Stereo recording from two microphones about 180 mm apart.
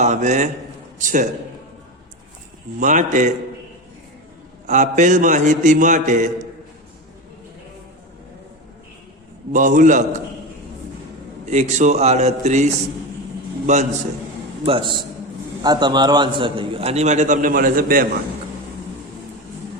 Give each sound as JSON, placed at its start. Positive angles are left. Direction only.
{"t": 0.0, "sound": "a man's voice", "side_deg": -40}
{"t": 2.8, "sound": "a man's voice", "side_deg": -45}
{"t": 4.6, "sound": "a man's voice", "side_deg": -40}
{"t": 9.5, "sound": "a man's voice", "side_deg": -45}
{"t": 11.5, "sound": "a man's voice", "side_deg": -40}
{"t": 14.6, "sound": "a man's voice", "side_deg": -30}